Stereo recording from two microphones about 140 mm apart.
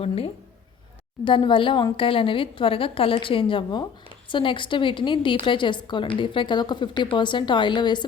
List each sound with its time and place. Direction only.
1.2 s a woman's voice: 35° left (ahead or behind)